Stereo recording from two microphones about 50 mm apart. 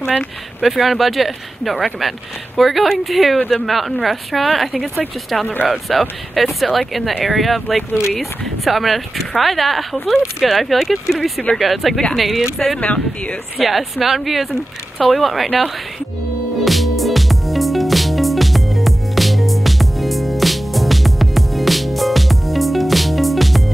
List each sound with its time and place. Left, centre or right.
0.6 s speech: centre
12.8 s speech: left
13.6 s speech: centre
16.6 s music: centre